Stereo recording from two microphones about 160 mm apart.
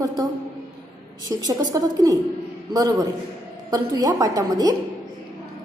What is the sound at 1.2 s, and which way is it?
A woman's voice, 25° right (ahead or behind).